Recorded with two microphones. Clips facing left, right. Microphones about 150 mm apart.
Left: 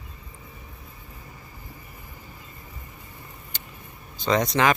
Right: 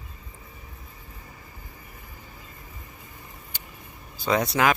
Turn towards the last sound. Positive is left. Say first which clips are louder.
# left 1 dB
turn(degrees=-5)  # may be behind; listen again after turning